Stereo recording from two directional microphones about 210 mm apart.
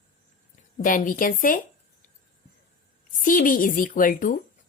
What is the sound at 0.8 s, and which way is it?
Speech, 40° left (ahead or behind).